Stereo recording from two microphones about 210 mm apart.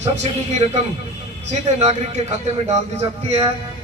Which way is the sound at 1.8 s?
30° right (ahead or behind).